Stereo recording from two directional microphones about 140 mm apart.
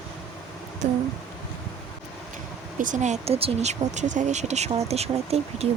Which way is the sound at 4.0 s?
60° right (ahead or behind).